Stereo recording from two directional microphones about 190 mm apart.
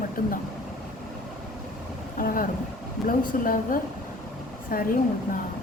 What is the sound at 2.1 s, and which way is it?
Speech, 45° left (ahead or behind).